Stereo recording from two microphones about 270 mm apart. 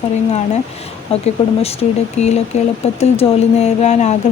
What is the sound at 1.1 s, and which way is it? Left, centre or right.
Speech, left.